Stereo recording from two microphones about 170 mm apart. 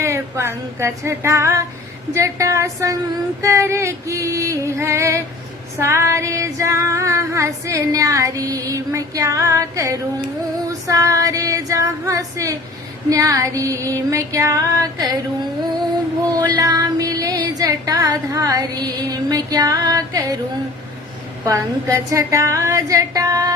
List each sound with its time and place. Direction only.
0.0 s female singing: 15° right (ahead or behind)
16.2 s female singing: 20° right (ahead or behind)
21.4 s female singing: 20° right (ahead or behind)